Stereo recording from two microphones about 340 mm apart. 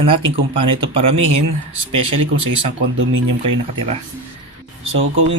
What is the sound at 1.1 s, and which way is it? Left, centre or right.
Speech, right.